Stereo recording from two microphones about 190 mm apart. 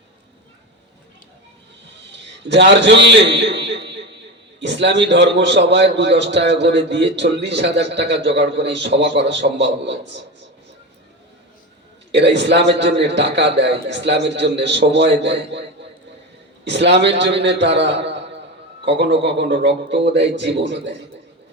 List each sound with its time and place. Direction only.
2.1 s a man's voice: 65° right (ahead or behind)
12.1 s a man's voice: 65° right (ahead or behind)
16.6 s a man's voice: 65° right (ahead or behind)